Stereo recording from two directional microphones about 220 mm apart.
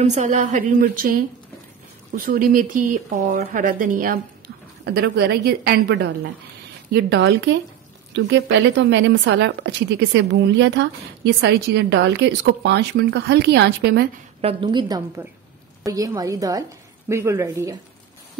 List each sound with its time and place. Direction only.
0.0 s a woman's voice: 30° right (ahead or behind)
14.4 s a woman's voice: 25° right (ahead or behind)